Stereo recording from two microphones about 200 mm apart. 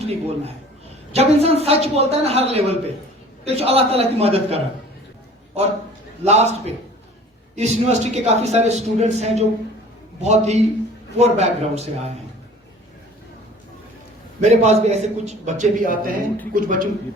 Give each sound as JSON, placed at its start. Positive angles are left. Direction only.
{"t": 0.0, "sound": "a man's voice", "side_deg": -30}
{"t": 6.2, "sound": "a man's voice", "side_deg": -35}
{"t": 14.4, "sound": "a man's voice", "side_deg": -35}